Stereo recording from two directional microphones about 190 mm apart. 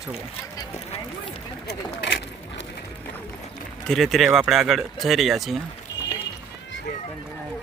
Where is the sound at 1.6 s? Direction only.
65° left (ahead or behind).